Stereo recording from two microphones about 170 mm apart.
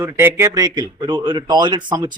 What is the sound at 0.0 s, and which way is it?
A man's voice, 15° right (ahead or behind).